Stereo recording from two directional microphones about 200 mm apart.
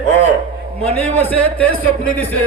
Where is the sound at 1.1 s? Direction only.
10° left (ahead or behind).